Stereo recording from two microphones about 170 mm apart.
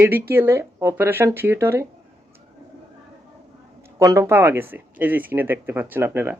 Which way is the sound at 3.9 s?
20° right (ahead or behind).